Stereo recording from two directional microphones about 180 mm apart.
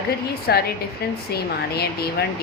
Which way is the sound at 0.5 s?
65° left (ahead or behind).